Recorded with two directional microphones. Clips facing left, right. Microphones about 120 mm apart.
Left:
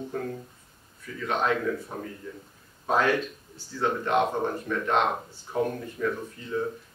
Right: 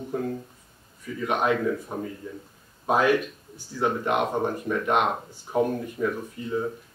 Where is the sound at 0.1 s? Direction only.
15° right (ahead or behind).